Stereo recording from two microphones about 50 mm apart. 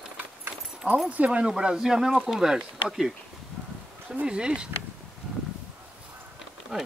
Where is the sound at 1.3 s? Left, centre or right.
Centre.